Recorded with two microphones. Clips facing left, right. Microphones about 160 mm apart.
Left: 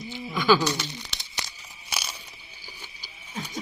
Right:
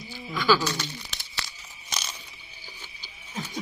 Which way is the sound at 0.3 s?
20° left (ahead or behind).